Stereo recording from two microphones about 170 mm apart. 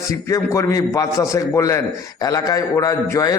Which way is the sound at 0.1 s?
20° left (ahead or behind).